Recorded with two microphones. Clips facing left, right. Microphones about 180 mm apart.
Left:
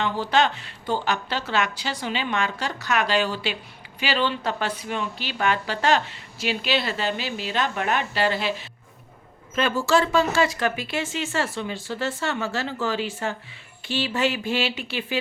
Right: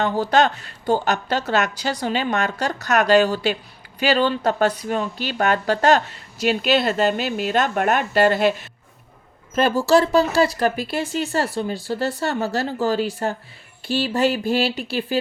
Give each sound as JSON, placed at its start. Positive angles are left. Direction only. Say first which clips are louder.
{"t": 0.0, "sound": "speech", "louder": "right 4 dB", "side_deg": -40}
{"t": 9.6, "sound": "speech", "louder": "right 5 dB", "side_deg": -40}